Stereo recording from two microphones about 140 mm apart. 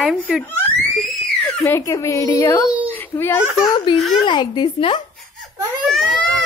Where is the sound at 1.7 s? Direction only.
20° left (ahead or behind).